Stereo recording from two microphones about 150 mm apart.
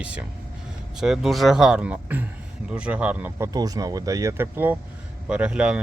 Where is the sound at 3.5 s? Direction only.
25° right (ahead or behind).